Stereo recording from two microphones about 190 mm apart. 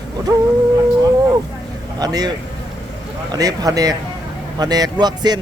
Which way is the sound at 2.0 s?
20° right (ahead or behind).